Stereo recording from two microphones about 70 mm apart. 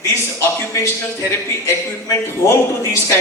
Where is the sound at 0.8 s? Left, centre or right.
Left.